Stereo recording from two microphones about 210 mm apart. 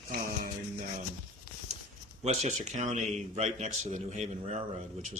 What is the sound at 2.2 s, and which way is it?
Speech, 35° right (ahead or behind).